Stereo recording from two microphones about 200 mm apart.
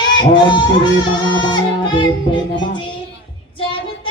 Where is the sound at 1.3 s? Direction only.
25° left (ahead or behind).